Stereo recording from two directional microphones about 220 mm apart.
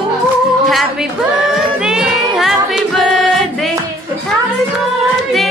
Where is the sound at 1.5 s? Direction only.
5° right (ahead or behind).